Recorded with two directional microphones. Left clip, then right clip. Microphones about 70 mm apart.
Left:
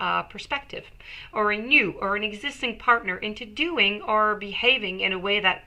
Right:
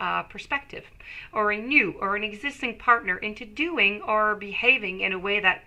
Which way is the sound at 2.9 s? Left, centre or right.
Right.